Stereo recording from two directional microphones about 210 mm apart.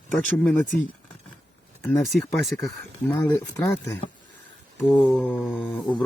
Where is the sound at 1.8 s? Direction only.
Centre (ahead or behind).